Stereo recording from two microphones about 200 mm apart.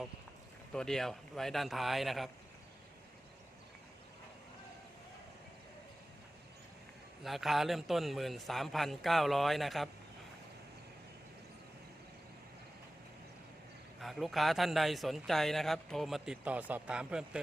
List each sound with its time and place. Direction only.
0.7 s a man's voice: 5° left (ahead or behind)
7.3 s a man's voice: centre (ahead or behind)
14.0 s a man's voice: centre (ahead or behind)